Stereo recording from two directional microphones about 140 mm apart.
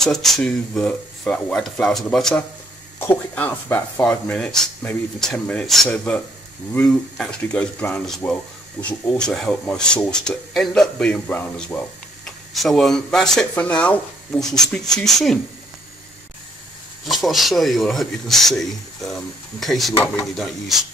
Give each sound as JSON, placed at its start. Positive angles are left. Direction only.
{"t": 0.0, "sound": "speech", "side_deg": 0}
{"t": 3.0, "sound": "speech", "side_deg": 15}
{"t": 4.0, "sound": "speech", "side_deg": 10}
{"t": 17.1, "sound": "speech", "side_deg": 0}